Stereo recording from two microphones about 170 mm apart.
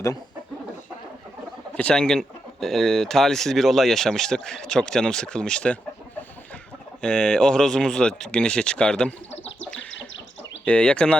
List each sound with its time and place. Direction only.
1.7 s speech: 5° left (ahead or behind)
7.0 s speech: 5° left (ahead or behind)
9.3 s chicken: 90° left
10.7 s speech: 5° left (ahead or behind)